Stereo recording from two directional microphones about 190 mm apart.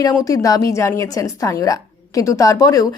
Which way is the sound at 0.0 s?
15° left (ahead or behind).